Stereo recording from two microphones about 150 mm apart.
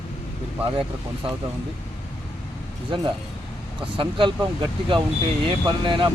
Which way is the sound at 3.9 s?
35° right (ahead or behind).